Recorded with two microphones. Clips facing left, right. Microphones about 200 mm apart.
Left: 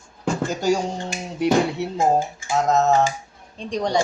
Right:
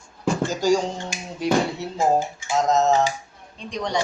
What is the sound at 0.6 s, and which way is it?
Finger snapping, 65° left (ahead or behind).